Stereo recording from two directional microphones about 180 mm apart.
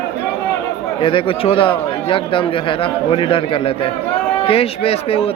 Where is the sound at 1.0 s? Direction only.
30° left (ahead or behind).